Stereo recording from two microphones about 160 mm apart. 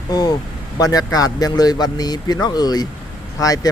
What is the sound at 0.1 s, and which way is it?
Speech, 25° left (ahead or behind).